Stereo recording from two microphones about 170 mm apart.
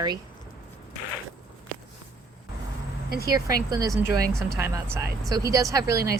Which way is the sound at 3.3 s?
20° right (ahead or behind).